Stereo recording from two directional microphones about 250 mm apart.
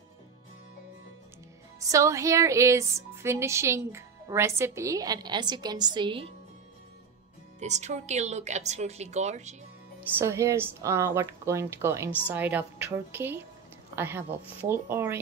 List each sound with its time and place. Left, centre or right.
1.8 s speech: centre
7.6 s a woman's voice: right
9.9 s speech: centre